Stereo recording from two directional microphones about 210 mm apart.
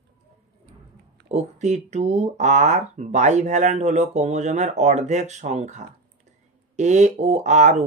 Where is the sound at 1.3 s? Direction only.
35° right (ahead or behind).